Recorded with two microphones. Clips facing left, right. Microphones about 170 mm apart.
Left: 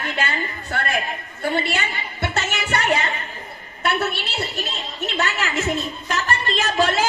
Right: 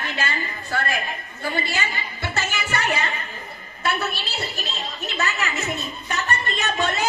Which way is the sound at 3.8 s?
65° left (ahead or behind).